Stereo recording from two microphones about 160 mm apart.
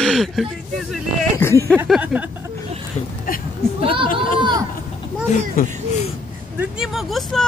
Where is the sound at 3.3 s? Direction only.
60° left (ahead or behind).